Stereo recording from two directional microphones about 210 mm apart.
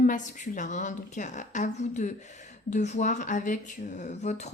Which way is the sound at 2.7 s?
35° left (ahead or behind).